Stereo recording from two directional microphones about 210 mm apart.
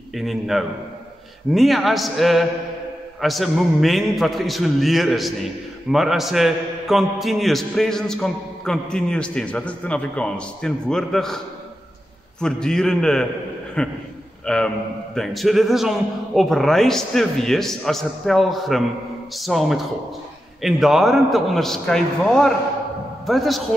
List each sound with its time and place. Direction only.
0.1 s a man's voice: centre (ahead or behind)